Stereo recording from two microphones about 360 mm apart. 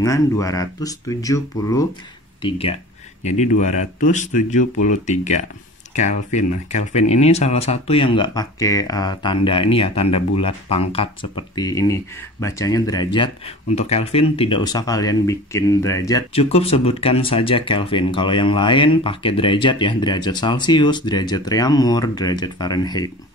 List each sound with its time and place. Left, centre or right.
0.0 s speech: centre
3.3 s speech: centre